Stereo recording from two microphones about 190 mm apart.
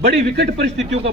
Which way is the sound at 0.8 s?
35° right (ahead or behind).